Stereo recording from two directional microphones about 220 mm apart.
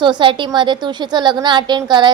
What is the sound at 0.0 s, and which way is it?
A woman's voice, 20° right (ahead or behind).